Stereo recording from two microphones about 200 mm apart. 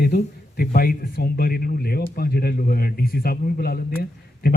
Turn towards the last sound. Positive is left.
turn(degrees=50)  # may be behind; listen again after turning